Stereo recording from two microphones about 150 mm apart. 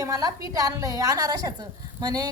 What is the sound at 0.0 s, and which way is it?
A woman's voice, 25° right (ahead or behind).